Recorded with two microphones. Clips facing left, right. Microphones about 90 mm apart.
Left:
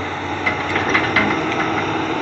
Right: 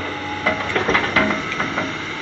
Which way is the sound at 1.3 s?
40° left (ahead or behind).